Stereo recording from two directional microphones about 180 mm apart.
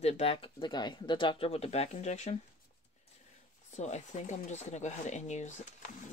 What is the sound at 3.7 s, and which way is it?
Speech, 40° left (ahead or behind).